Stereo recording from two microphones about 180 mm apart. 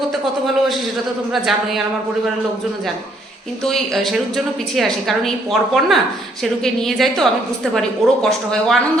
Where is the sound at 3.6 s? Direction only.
Centre (ahead or behind).